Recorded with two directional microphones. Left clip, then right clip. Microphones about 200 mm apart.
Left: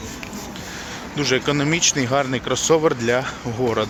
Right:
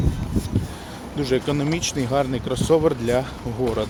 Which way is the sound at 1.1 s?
10° right (ahead or behind).